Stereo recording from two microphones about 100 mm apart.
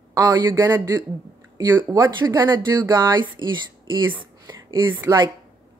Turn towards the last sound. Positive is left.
turn(degrees=-20)  # may be behind; listen again after turning